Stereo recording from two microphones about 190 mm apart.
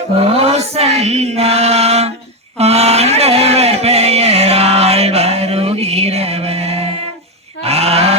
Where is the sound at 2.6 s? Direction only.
35° right (ahead or behind).